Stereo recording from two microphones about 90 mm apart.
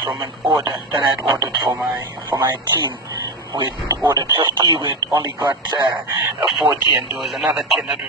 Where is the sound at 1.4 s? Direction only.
30° right (ahead or behind).